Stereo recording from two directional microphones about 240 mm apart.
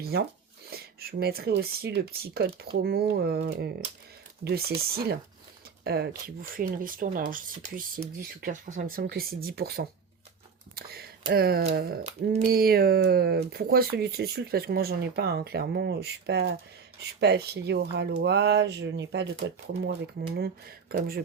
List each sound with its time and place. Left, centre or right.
0.0 s speech: right
12.0 s speech: right
12.5 s speech: right